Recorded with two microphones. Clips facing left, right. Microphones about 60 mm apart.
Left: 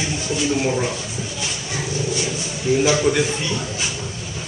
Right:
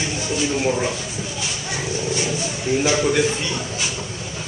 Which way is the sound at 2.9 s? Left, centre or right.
Centre.